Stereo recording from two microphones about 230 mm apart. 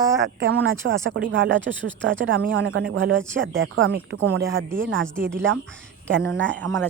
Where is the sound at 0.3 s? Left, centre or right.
Right.